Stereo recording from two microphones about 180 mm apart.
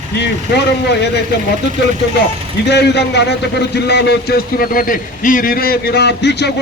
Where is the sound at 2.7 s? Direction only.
70° left (ahead or behind).